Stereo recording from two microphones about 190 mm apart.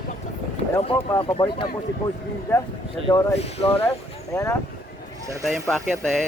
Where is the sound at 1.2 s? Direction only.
25° left (ahead or behind).